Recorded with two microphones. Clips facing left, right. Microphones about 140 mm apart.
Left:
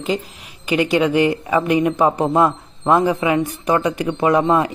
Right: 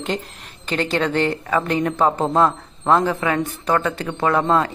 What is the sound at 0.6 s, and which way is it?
A woman's voice, 10° left (ahead or behind).